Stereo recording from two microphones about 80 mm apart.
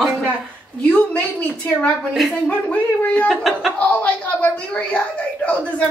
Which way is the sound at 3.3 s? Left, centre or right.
Centre.